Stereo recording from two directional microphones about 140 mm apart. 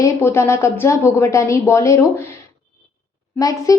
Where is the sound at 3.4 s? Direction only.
25° left (ahead or behind).